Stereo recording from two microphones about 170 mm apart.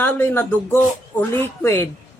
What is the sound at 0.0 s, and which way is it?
Speech, 10° left (ahead or behind).